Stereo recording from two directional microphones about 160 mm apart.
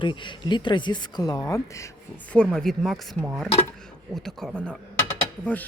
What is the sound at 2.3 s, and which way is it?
A woman's voice, 5° left (ahead or behind).